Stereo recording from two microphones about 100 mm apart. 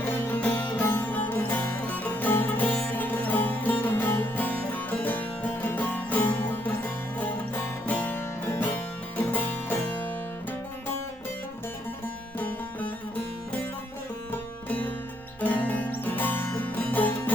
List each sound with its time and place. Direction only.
0.2 s music: 15° left (ahead or behind)
14.7 s music: 15° left (ahead or behind)